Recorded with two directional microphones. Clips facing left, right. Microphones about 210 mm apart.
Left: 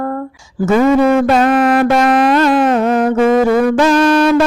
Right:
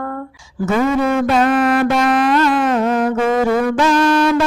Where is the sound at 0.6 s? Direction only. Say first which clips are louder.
Left 5 dB; 40° left (ahead or behind).